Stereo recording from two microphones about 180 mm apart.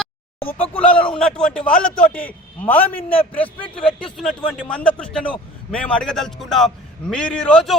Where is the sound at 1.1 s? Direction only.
5° left (ahead or behind).